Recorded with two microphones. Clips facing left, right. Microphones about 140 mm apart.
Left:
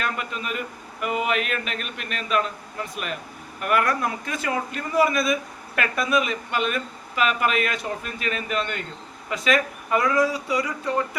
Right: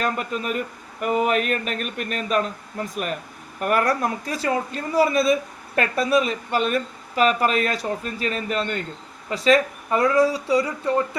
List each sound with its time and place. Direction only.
0.0 s speech: 40° right (ahead or behind)